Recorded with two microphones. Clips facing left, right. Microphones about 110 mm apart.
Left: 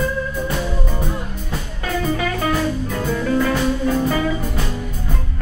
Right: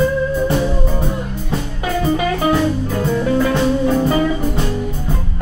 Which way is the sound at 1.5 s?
25° right (ahead or behind).